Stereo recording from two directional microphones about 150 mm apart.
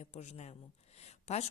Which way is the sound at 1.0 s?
45° left (ahead or behind).